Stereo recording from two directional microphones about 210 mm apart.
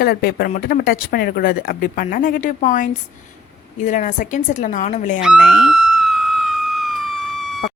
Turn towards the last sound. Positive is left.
turn(degrees=0)  # may be behind; listen again after turning